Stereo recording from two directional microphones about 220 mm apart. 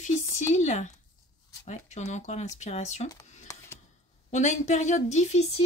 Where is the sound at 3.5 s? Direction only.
15° left (ahead or behind).